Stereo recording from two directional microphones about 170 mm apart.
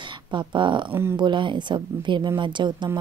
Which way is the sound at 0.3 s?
25° right (ahead or behind).